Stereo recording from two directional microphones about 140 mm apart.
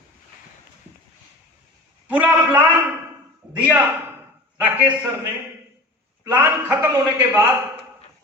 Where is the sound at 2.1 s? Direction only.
10° right (ahead or behind).